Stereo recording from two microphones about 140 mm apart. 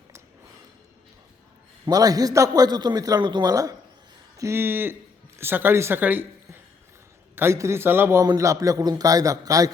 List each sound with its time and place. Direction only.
1.8 s a man's voice: 25° right (ahead or behind)